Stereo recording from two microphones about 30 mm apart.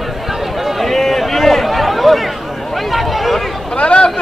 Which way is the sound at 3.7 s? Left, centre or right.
Left.